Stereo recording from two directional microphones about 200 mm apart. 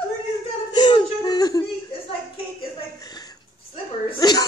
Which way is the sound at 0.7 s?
20° left (ahead or behind).